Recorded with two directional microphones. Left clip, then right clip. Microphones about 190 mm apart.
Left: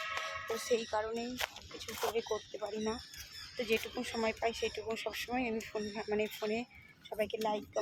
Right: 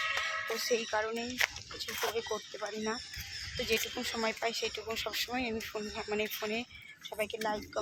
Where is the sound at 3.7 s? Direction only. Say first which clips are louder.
Right 2 dB; 5° left (ahead or behind).